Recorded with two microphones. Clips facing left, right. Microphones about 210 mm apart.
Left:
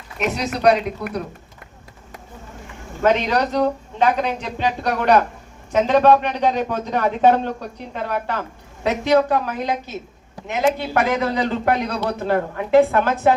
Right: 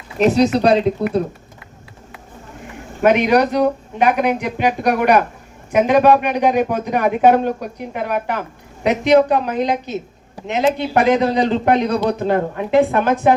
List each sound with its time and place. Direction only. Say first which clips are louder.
0.2 s speech: right 9 dB; 30° right (ahead or behind)
3.0 s speech: right 5 dB; 15° right (ahead or behind)